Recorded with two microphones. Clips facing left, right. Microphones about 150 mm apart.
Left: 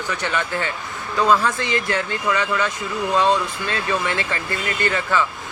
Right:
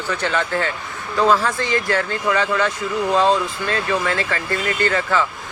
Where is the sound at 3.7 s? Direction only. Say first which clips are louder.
Right 2 dB; 20° left (ahead or behind).